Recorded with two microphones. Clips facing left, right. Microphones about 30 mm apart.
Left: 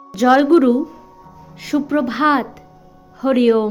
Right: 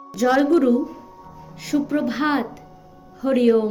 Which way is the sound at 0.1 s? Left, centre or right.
Left.